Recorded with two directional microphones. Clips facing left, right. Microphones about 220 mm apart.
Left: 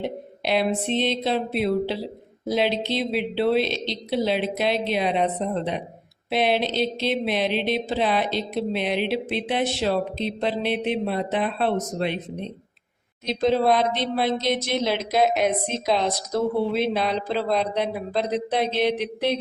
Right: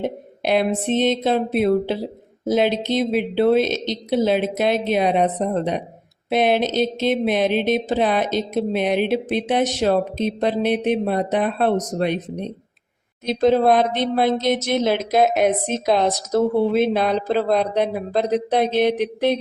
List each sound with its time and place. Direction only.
0.0 s speech: 50° right (ahead or behind)